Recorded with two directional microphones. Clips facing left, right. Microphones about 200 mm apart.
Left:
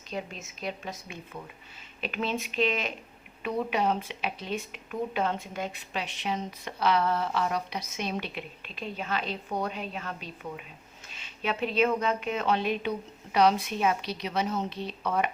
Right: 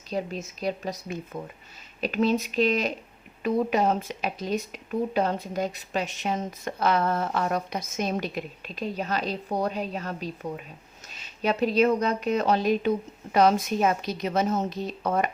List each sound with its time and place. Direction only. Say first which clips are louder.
0.1 s speech: right 6 dB; 35° right (ahead or behind)